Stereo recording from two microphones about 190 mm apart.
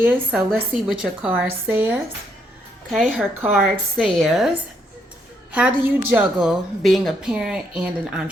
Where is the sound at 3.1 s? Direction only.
10° right (ahead or behind).